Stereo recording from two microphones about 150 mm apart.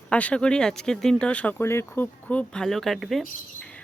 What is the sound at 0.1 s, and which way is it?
Speech, 10° left (ahead or behind).